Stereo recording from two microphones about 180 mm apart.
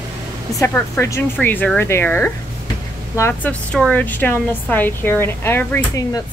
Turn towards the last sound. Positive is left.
turn(degrees=15)  # may be behind; listen again after turning